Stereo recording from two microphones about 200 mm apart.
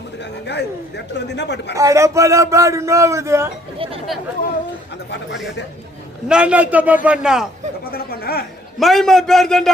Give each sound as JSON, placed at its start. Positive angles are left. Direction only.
{"t": 0.4, "sound": "speech", "side_deg": 60}
{"t": 1.7, "sound": "a man's voice", "side_deg": -15}
{"t": 6.2, "sound": "a man's voice", "side_deg": -5}
{"t": 7.9, "sound": "speech", "side_deg": 50}
{"t": 8.8, "sound": "a man's voice", "side_deg": 0}